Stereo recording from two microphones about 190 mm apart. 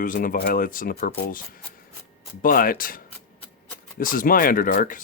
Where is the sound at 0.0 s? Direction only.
45° left (ahead or behind).